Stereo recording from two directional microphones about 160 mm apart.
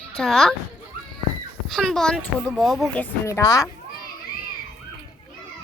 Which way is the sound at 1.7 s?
5° left (ahead or behind).